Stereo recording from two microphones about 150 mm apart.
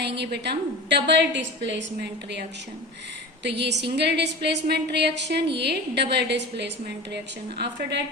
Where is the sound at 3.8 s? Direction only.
90° right.